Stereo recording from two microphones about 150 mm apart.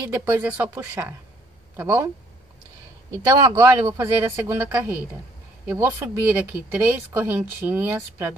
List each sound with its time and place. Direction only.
0.1 s speech: 15° right (ahead or behind)
3.3 s speech: 25° right (ahead or behind)